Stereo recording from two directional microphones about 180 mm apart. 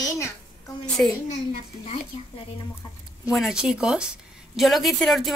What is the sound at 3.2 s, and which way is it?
A woman's voice, centre (ahead or behind).